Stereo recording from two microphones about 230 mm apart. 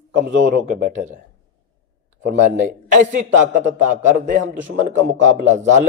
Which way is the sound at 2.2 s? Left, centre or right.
Right.